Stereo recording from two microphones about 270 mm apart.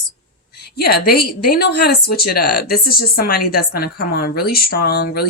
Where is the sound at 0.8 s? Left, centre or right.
Left.